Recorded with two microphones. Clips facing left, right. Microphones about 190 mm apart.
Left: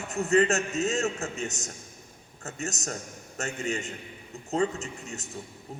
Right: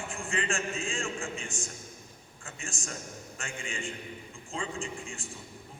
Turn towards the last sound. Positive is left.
turn(degrees=40)  # may be behind; listen again after turning